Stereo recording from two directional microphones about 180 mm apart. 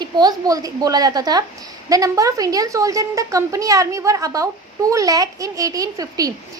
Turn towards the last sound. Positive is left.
turn(degrees=-20)  # may be behind; listen again after turning